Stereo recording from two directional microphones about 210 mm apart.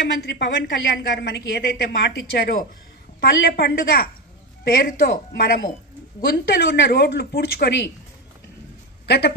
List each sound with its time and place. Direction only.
0.2 s a woman's voice: 50° left (ahead or behind)
9.0 s a woman's voice: 50° left (ahead or behind)